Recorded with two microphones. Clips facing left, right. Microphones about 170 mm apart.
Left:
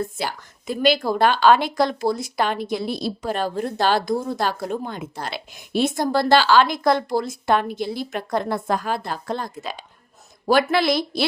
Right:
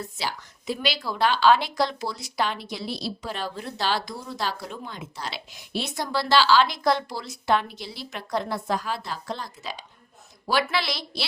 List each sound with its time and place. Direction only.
0.0 s a woman's voice: 50° left (ahead or behind)